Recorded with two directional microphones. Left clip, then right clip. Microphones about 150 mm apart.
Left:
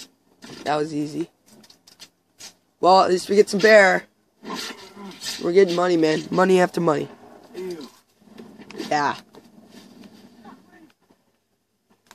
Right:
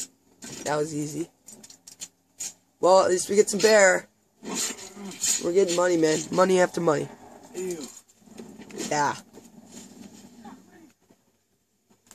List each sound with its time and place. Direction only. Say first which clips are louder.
0.0 s a sound: right 2 dB; 5° left (ahead or behind)
0.7 s speech: left 4 dB; 25° left (ahead or behind)
2.8 s speech: left 3 dB; 25° left (ahead or behind)
4.4 s rub: even; centre (ahead or behind)
5.4 s speech: left 5 dB; 30° left (ahead or behind)
8.9 s a sound: left 3 dB; 25° left (ahead or behind)